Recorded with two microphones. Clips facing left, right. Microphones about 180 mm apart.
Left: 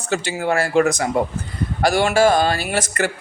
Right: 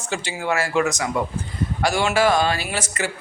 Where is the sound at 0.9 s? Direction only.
55° left (ahead or behind).